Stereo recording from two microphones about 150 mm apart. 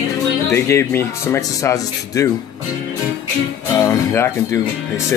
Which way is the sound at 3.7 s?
20° left (ahead or behind).